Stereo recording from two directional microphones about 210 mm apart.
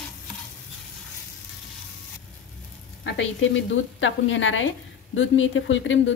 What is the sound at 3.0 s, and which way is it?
A woman's voice, 65° left (ahead or behind).